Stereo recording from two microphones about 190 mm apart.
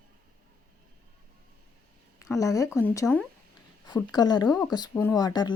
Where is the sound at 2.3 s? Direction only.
15° left (ahead or behind).